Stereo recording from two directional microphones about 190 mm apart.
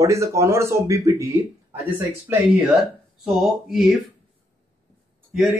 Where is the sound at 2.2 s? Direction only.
Centre (ahead or behind).